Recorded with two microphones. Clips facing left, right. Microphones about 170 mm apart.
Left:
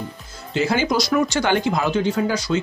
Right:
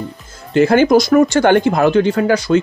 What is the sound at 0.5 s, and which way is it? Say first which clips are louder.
Speech: right 10 dB; 55° right (ahead or behind).